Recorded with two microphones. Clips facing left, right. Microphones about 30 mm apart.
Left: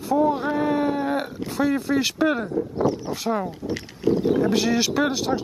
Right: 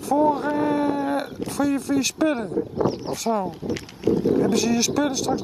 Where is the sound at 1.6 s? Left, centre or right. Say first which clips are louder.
Even; centre.